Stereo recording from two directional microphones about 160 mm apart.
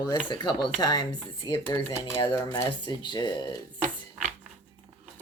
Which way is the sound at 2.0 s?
15° left (ahead or behind).